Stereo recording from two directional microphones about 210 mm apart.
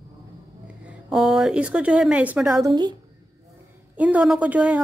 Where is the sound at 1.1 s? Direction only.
5° right (ahead or behind).